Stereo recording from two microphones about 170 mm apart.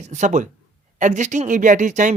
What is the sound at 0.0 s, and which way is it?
Speech, 45° right (ahead or behind).